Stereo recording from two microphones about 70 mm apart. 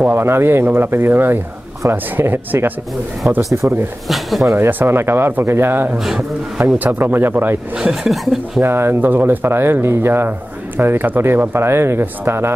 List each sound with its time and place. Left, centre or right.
0.0 s speech: right
4.1 s speech: centre
4.6 s speech: right
5.9 s a man's voice: centre
6.6 s speech: right
7.7 s speech: centre
8.6 s speech: right